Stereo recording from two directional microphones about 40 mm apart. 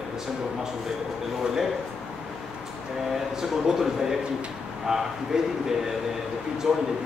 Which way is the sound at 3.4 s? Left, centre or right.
Centre.